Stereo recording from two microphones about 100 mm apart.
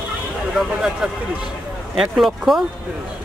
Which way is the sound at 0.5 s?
5° right (ahead or behind).